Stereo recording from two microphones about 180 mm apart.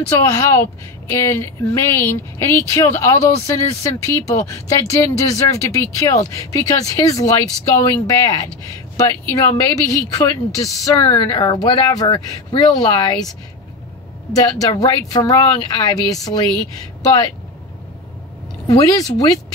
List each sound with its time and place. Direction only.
0.2 s a woman's voice: 15° left (ahead or behind)
14.6 s speech: 20° left (ahead or behind)
18.7 s speech: 20° left (ahead or behind)